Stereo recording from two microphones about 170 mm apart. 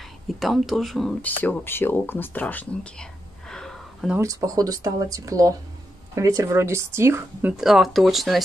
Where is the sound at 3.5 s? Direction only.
5° left (ahead or behind).